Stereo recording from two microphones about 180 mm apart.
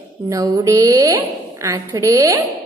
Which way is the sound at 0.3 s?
20° right (ahead or behind).